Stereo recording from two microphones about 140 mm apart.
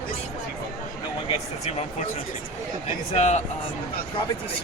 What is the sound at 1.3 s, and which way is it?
Speech, 50° left (ahead or behind).